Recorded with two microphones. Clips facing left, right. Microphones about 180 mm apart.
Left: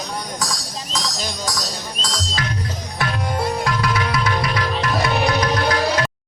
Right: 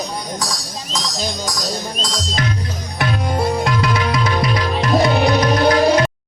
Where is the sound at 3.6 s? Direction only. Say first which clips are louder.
Right 3 dB; 20° right (ahead or behind).